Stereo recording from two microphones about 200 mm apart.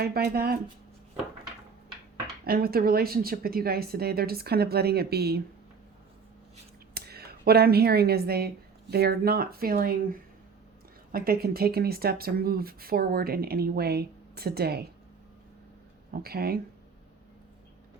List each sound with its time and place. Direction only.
0.0 s speech: 50° right (ahead or behind)
2.4 s speech: 50° right (ahead or behind)
6.9 s speech: 50° right (ahead or behind)
16.1 s speech: 50° right (ahead or behind)